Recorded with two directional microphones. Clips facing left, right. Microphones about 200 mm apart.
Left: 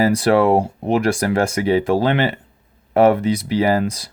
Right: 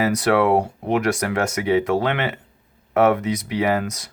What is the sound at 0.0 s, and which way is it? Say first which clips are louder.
Speech: left 3 dB; 30° left (ahead or behind).